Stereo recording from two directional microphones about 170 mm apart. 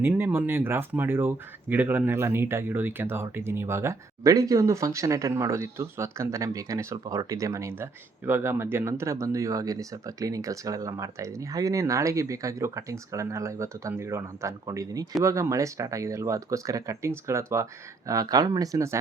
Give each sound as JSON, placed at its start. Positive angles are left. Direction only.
{"t": 0.0, "sound": "speech", "side_deg": -10}